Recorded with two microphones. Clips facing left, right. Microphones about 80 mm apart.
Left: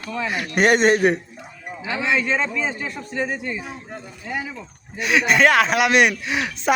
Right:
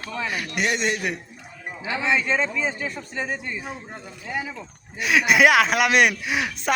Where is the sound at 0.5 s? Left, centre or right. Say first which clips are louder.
Left 10 dB; left.